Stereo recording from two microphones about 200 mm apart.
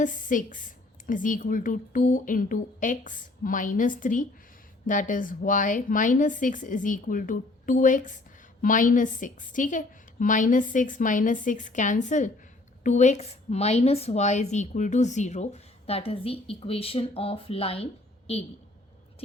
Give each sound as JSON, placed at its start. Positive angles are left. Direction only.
{"t": 0.0, "sound": "a woman's voice", "side_deg": 40}